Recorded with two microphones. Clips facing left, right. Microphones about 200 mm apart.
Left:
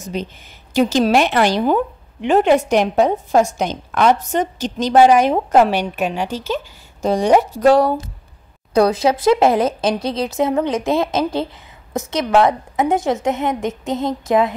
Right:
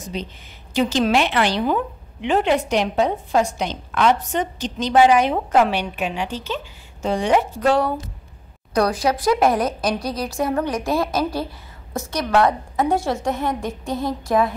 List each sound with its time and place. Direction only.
0.1 s a woman's voice: 50° left (ahead or behind)
8.7 s a woman's voice: 25° left (ahead or behind)